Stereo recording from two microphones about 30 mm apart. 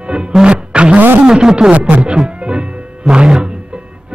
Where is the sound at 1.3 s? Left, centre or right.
Right.